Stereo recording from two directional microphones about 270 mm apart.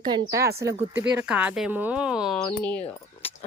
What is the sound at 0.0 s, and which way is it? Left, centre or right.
A woman's voice, centre.